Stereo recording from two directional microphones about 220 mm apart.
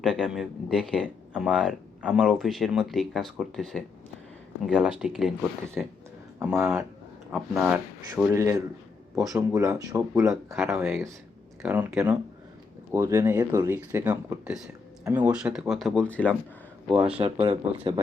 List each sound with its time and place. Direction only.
0.0 s speech: 5° right (ahead or behind)
7.3 s speech: 5° right (ahead or behind)
17.2 s speech: 25° right (ahead or behind)